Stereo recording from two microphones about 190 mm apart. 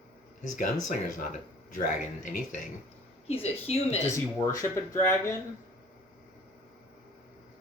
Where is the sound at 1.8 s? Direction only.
45° left (ahead or behind).